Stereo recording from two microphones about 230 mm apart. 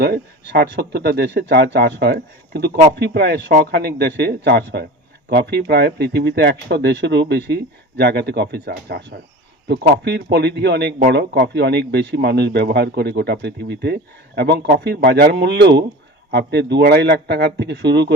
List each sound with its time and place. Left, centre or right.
0.0 s a man's voice: right